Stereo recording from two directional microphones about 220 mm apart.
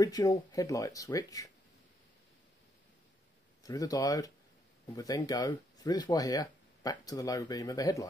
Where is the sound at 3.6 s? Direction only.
15° left (ahead or behind).